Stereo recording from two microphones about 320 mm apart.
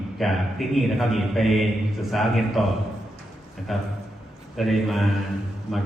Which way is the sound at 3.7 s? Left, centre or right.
Centre.